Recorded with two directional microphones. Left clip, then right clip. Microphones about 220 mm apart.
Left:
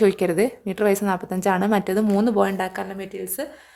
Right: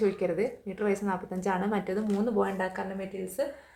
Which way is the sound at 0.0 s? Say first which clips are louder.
Left 9 dB; 50° left (ahead or behind).